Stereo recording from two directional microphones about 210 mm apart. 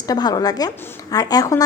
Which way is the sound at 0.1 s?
20° left (ahead or behind).